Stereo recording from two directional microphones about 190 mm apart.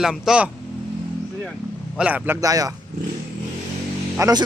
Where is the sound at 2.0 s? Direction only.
10° right (ahead or behind).